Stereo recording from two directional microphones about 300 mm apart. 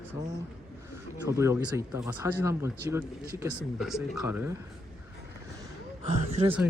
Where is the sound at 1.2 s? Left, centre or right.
Centre.